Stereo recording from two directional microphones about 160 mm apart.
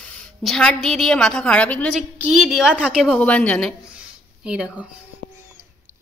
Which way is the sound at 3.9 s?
5° right (ahead or behind).